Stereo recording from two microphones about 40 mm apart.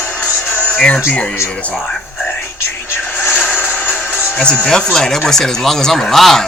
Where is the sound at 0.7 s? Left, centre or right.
Left.